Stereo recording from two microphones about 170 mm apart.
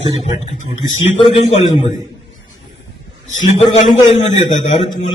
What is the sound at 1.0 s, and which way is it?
Speech, 35° left (ahead or behind).